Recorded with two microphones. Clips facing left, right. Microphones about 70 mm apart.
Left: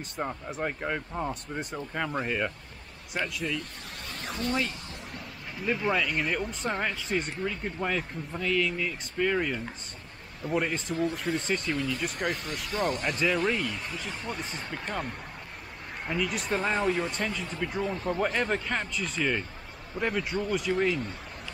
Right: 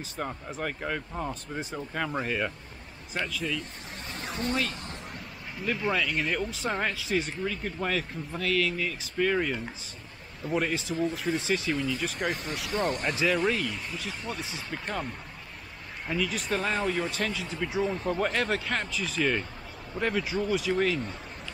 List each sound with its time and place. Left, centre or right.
0.2 s speech: centre
5.7 s speech: centre
7.4 s speech: centre
10.8 s speech: left
11.1 s speech: centre
16.1 s speech: centre
18.1 s speech: centre